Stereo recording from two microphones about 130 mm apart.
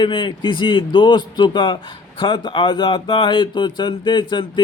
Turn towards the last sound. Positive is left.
turn(degrees=35)  # may be behind; listen again after turning